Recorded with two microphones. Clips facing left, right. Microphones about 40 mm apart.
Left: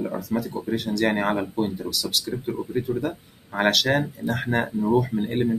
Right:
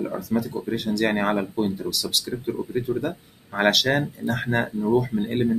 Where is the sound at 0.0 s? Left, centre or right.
Centre.